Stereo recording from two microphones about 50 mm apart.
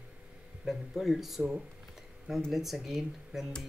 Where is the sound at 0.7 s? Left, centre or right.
Centre.